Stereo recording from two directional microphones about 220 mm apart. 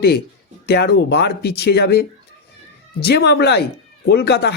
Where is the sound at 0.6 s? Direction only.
50° left (ahead or behind).